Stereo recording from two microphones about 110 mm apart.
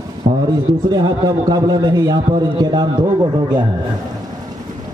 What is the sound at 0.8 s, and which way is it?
A man's voice, 40° right (ahead or behind).